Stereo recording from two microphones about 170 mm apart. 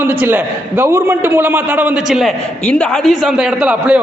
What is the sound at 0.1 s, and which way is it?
A man's voice, 10° right (ahead or behind).